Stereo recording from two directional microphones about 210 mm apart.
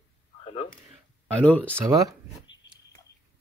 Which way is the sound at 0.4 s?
30° left (ahead or behind).